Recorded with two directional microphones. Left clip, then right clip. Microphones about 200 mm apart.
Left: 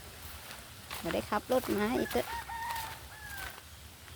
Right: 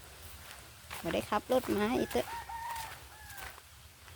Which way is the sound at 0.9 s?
5° right (ahead or behind).